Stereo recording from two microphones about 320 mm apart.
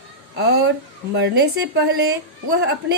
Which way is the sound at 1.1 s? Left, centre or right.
Right.